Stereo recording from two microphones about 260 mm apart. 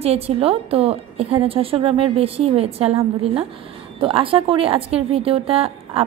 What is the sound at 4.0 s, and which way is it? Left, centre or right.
Speech, right.